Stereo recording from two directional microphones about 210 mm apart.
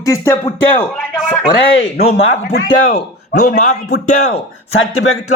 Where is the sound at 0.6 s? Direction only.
5° left (ahead or behind).